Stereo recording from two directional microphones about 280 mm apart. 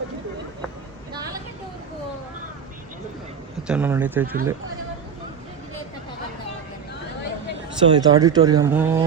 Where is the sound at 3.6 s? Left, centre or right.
Centre.